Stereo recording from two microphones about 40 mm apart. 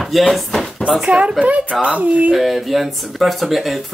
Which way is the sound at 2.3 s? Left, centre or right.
Centre.